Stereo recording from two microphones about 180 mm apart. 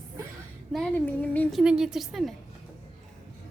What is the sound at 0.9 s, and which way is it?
A woman's voice, 10° left (ahead or behind).